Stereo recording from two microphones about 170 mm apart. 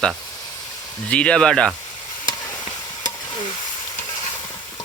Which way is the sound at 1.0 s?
5° left (ahead or behind).